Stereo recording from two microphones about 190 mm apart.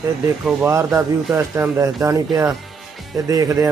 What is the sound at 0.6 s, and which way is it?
A man's voice, 15° right (ahead or behind).